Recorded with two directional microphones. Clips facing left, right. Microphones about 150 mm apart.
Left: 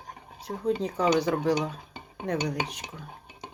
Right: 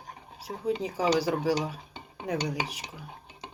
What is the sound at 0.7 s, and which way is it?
Speech, 5° right (ahead or behind).